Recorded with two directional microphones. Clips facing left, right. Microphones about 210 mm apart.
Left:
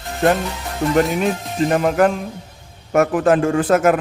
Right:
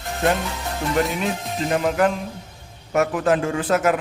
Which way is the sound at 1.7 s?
50° left (ahead or behind).